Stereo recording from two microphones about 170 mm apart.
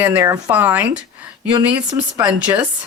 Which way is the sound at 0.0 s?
15° right (ahead or behind).